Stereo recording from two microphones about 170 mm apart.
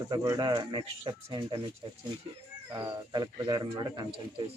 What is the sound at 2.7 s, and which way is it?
Speech, 20° right (ahead or behind).